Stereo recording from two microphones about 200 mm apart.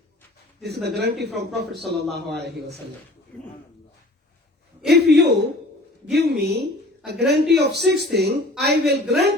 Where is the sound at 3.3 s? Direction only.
10° left (ahead or behind).